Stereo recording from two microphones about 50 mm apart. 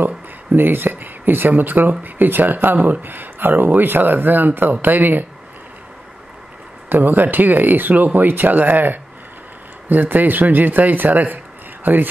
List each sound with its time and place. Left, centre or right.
0.0 s speech: right
6.9 s a man's voice: right